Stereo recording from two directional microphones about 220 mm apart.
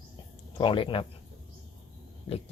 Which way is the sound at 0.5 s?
25° left (ahead or behind).